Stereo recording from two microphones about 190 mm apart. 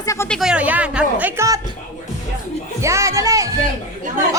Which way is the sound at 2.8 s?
15° right (ahead or behind).